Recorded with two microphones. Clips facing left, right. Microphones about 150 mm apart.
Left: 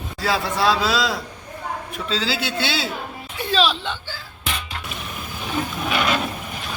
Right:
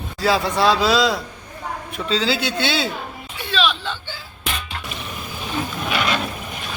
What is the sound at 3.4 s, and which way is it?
Whimper, 35° left (ahead or behind).